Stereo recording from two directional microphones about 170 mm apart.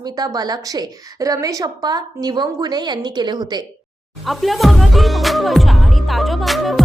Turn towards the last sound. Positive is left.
turn(degrees=0)  # may be behind; listen again after turning